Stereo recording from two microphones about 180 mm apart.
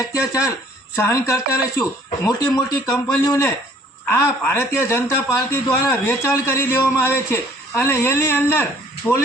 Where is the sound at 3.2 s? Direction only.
15° left (ahead or behind).